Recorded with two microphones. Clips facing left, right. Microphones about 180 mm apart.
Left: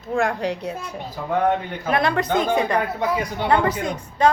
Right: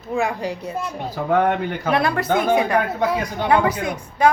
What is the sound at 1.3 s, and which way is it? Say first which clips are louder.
Speech: right 2 dB; 70° right (ahead or behind).